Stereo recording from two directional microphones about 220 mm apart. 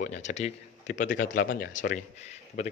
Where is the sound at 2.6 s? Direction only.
30° left (ahead or behind).